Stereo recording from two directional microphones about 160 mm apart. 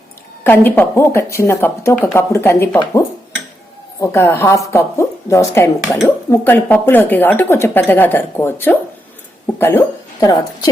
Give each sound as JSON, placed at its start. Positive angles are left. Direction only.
{"t": 0.4, "sound": "speech", "side_deg": 15}
{"t": 4.0, "sound": "speech", "side_deg": 15}